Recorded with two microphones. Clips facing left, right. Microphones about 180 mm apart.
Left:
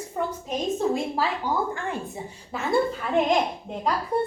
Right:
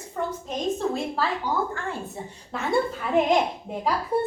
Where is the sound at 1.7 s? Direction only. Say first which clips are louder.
Left 1 dB; 15° left (ahead or behind).